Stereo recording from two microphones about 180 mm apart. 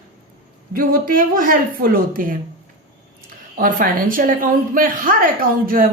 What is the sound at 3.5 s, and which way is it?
A woman's voice, 50° right (ahead or behind).